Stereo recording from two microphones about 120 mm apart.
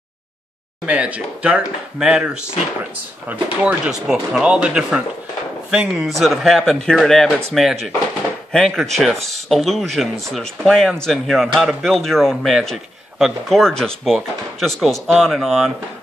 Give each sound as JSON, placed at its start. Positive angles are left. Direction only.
{"t": 0.8, "sound": "speech", "side_deg": -10}